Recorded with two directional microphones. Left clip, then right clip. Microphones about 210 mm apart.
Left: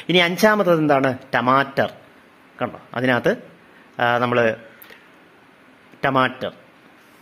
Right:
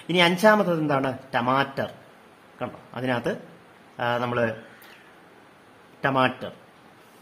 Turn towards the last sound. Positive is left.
turn(degrees=25)  # may be behind; listen again after turning